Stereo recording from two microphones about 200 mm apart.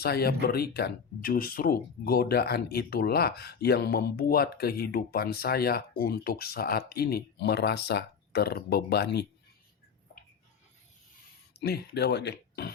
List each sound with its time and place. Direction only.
0.0 s speech: 50° left (ahead or behind)
11.5 s speech: 55° left (ahead or behind)